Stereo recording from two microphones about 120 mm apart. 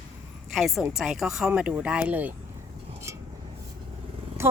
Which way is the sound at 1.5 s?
15° right (ahead or behind).